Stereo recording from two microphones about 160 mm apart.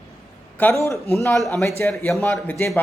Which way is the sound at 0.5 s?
15° left (ahead or behind).